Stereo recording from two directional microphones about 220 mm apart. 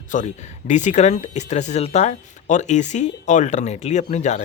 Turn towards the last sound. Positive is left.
turn(degrees=30)  # may be behind; listen again after turning